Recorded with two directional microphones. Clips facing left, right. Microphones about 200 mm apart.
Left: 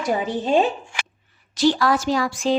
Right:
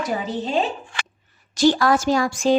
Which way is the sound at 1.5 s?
45° right (ahead or behind).